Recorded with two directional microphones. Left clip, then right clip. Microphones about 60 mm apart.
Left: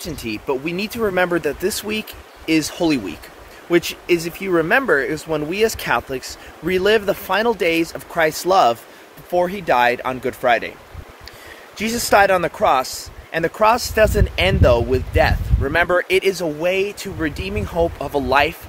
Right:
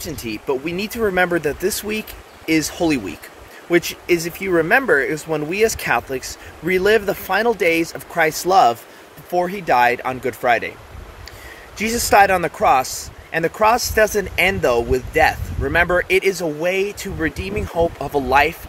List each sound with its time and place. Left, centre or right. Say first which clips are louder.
0.0 s speech: even; centre
9.3 s speech: even; centre
10.2 s speech: even; centre
11.8 s speech: right 1 dB; centre